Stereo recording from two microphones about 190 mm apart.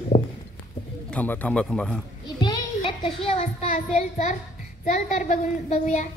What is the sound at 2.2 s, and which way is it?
A child's voice, 25° left (ahead or behind).